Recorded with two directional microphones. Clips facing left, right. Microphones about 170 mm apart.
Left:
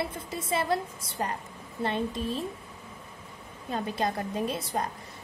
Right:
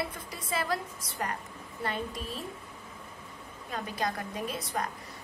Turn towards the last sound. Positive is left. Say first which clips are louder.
# left 3 dB
turn(degrees=25)  # may be behind; listen again after turning